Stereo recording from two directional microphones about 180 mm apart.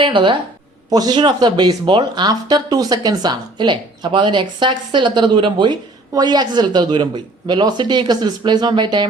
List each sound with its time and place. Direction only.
0.0 s speech: 30° right (ahead or behind)